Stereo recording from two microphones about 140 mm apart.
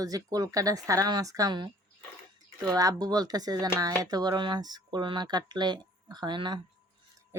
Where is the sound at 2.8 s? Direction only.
25° right (ahead or behind).